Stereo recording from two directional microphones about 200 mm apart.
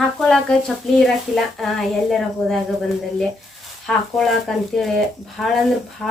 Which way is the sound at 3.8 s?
Centre (ahead or behind).